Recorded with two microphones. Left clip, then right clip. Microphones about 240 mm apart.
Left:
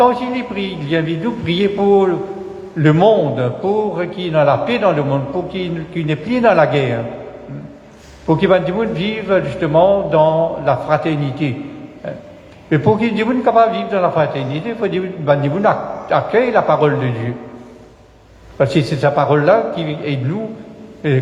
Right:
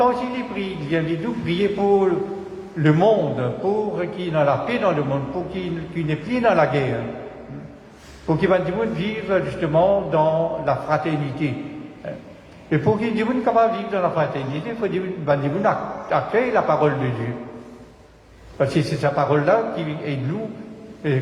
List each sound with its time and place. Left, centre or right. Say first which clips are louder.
0.0 s a man's voice: left 6 dB; left
8.3 s a man's voice: left 6 dB; left
12.7 s a man's voice: left 6 dB; left
18.6 s a man's voice: left 6 dB; left